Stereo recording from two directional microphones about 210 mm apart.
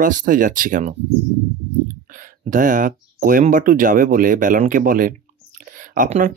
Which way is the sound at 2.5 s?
40° right (ahead or behind).